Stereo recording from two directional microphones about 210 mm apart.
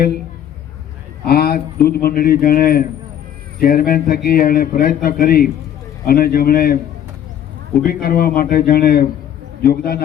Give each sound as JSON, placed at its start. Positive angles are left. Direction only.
{"t": 1.2, "sound": "a man's voice", "side_deg": 45}
{"t": 7.8, "sound": "a man's voice", "side_deg": 45}